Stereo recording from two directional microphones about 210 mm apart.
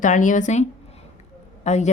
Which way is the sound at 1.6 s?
35° left (ahead or behind).